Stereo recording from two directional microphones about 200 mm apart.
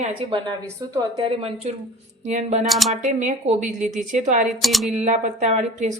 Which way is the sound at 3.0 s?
40° right (ahead or behind).